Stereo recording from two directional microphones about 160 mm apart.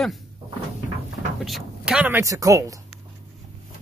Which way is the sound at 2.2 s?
20° right (ahead or behind).